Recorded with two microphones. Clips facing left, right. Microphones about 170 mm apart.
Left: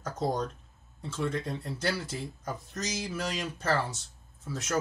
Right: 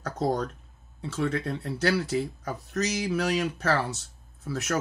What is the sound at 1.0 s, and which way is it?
Speech, 70° right (ahead or behind).